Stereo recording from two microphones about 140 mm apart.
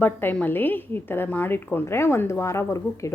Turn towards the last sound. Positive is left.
turn(degrees=20)  # may be behind; listen again after turning